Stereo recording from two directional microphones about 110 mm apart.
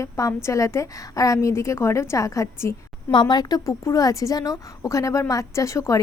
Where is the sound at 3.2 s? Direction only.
35° left (ahead or behind).